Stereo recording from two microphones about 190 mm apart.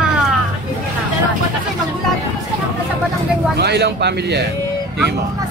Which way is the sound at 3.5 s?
60° right (ahead or behind).